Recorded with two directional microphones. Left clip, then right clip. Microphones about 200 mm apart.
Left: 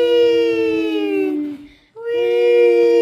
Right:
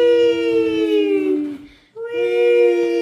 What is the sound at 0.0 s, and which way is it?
Siren, 45° left (ahead or behind).